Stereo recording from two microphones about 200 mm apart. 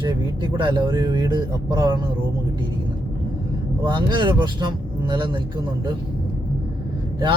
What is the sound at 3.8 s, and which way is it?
A man's voice, 25° right (ahead or behind).